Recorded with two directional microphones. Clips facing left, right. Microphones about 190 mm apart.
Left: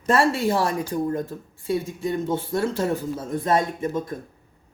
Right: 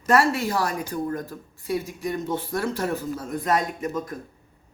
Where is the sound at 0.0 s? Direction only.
30° left (ahead or behind).